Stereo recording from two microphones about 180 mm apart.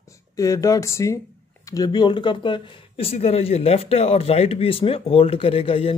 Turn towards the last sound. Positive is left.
turn(degrees=30)  # may be behind; listen again after turning